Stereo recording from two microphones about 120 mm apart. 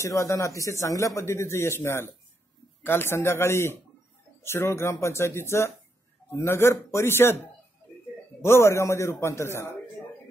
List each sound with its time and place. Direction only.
0.0 s speech: 25° left (ahead or behind)